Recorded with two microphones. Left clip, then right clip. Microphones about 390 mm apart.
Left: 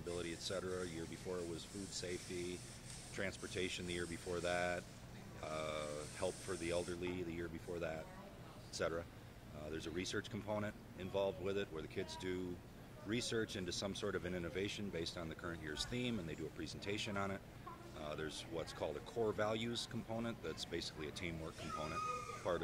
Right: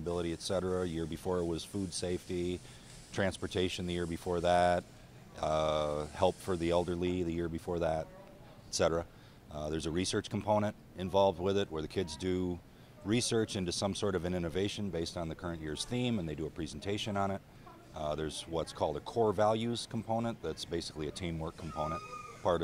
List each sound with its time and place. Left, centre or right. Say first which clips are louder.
0.1 s speech: right 9 dB; right
3.1 s speech: right 10 dB; right
5.4 s speech: right 13 dB; right